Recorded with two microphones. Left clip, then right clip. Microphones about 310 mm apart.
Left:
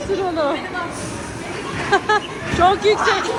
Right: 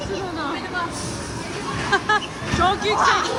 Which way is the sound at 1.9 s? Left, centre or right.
Centre.